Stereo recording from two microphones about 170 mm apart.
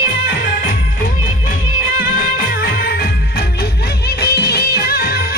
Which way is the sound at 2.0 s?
60° left (ahead or behind).